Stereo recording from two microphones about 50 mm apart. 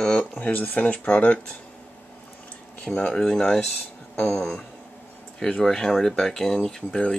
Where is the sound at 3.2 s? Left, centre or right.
Centre.